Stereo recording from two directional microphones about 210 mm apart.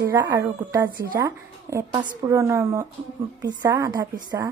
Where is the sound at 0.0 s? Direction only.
15° right (ahead or behind).